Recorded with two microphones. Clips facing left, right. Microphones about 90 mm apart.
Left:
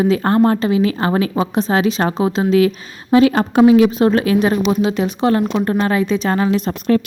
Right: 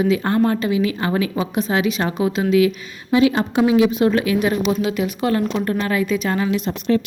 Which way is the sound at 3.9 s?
40° left (ahead or behind).